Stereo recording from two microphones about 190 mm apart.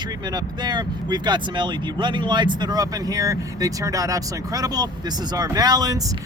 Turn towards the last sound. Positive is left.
turn(degrees=-20)  # may be behind; listen again after turning